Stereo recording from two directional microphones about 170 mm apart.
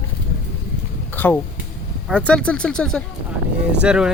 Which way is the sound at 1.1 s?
10° left (ahead or behind).